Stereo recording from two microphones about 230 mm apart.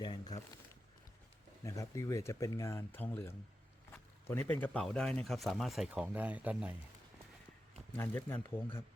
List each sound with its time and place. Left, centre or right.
0.0 s a sound: centre
1.6 s speech: centre
7.9 s speech: centre